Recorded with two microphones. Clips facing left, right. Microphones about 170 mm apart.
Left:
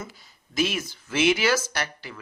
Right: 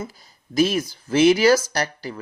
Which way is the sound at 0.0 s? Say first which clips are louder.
Right 6 dB; 35° right (ahead or behind).